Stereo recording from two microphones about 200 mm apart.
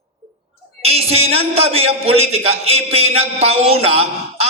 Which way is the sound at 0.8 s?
30° right (ahead or behind).